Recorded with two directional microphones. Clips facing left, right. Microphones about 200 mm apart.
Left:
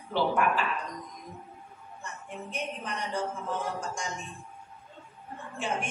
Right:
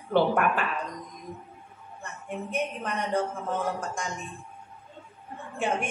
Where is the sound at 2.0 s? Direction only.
55° right (ahead or behind).